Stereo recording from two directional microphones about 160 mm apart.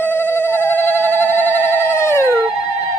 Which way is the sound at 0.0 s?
15° left (ahead or behind).